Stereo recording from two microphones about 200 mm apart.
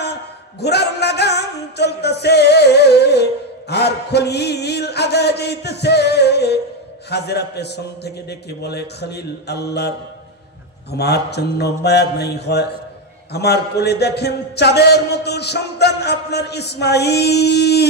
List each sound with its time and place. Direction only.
0.6 s music: 55° left (ahead or behind)
7.1 s a man's voice: 55° left (ahead or behind)
11.0 s a man's voice: 55° left (ahead or behind)